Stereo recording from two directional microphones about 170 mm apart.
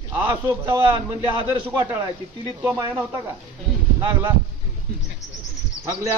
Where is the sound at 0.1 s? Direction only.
10° right (ahead or behind).